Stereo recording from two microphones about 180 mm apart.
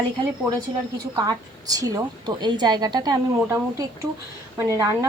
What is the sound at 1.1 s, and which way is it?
A woman's voice, 20° right (ahead or behind).